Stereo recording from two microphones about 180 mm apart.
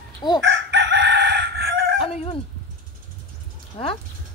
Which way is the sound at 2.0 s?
35° left (ahead or behind).